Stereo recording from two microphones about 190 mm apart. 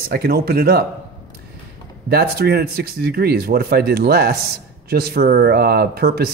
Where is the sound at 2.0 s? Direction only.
55° right (ahead or behind).